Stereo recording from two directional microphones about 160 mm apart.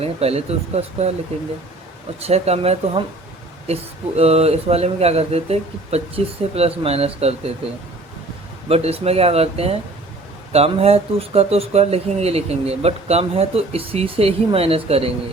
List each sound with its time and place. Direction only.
0.0 s speech: 40° right (ahead or behind)
2.2 s speech: 40° right (ahead or behind)
8.7 s speech: 40° right (ahead or behind)